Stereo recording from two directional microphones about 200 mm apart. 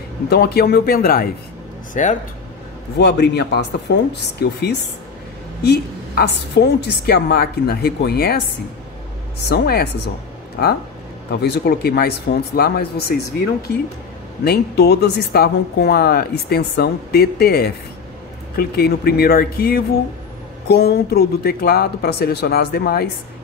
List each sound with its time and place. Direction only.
0.3 s speech: 55° left (ahead or behind); by 2.1 s 40° left (ahead or behind)
3.0 s speech: 55° left (ahead or behind)
9.5 s speech: 55° left (ahead or behind)
11.4 s speech: 55° left (ahead or behind)
14.4 s speech: 55° left (ahead or behind)